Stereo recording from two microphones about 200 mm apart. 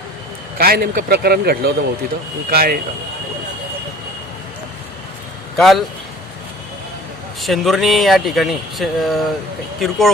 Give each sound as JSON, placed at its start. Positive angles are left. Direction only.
{"t": 0.6, "sound": "a man's voice", "side_deg": -50}
{"t": 5.6, "sound": "speech", "side_deg": 0}
{"t": 7.4, "sound": "speech", "side_deg": 0}